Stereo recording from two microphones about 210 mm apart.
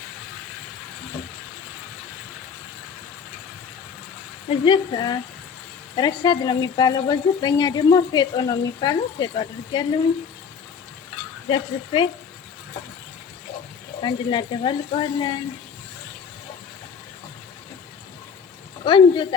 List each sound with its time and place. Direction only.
4.4 s speech: 25° left (ahead or behind)
11.4 s speech: 25° left (ahead or behind)
14.0 s speech: 20° left (ahead or behind)
18.9 s speech: 25° left (ahead or behind)